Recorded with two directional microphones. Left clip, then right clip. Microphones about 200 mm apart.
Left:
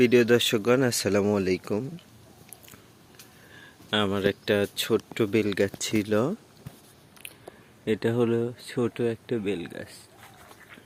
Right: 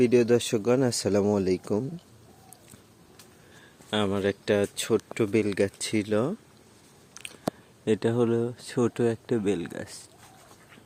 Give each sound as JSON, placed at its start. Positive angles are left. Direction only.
{"t": 0.0, "sound": "speech", "side_deg": -5}
{"t": 3.8, "sound": "speech", "side_deg": -10}
{"t": 7.2, "sound": "a sound", "side_deg": -5}
{"t": 7.9, "sound": "speech", "side_deg": -10}